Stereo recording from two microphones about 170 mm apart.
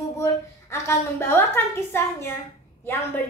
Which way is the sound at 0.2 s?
15° left (ahead or behind).